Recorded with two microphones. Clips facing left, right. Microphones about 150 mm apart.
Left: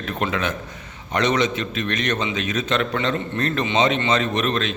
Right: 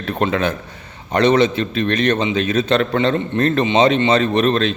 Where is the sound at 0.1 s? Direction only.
35° right (ahead or behind).